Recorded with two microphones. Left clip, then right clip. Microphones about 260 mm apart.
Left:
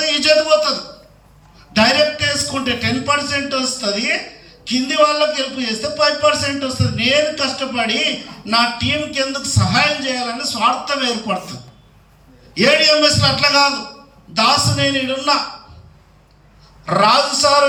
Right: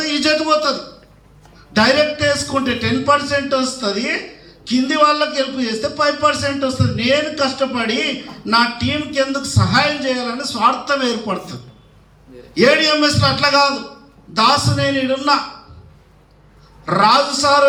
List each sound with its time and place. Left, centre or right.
0.0 s a man's voice: centre
12.5 s a man's voice: centre
16.8 s a man's voice: centre